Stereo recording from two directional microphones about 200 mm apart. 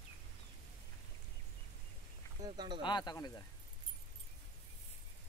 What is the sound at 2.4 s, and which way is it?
Speech, 20° right (ahead or behind).